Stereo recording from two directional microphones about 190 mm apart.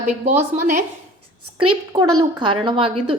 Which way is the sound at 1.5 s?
25° right (ahead or behind).